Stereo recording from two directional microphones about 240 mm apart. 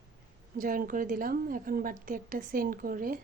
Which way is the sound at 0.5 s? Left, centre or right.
Right.